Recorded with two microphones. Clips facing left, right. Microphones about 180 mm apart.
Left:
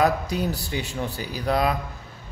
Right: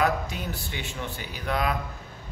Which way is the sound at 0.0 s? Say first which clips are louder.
Left 4 dB; 40° left (ahead or behind).